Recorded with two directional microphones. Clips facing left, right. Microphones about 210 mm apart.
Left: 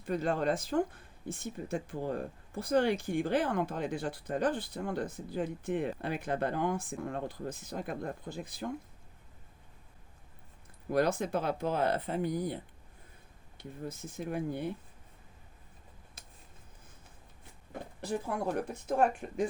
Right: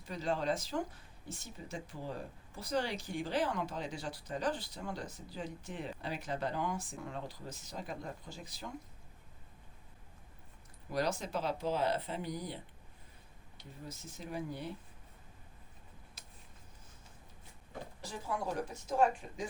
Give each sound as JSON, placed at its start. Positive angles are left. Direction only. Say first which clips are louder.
{"t": 0.0, "sound": "speech", "louder": "left 5 dB", "side_deg": 55}
{"t": 10.9, "sound": "speech", "louder": "left 6 dB", "side_deg": 55}
{"t": 13.6, "sound": "speech", "louder": "left 8 dB", "side_deg": 55}
{"t": 18.0, "sound": "speech", "louder": "left 6 dB", "side_deg": 55}